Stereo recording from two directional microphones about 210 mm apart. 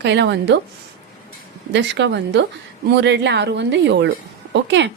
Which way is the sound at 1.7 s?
55° right (ahead or behind).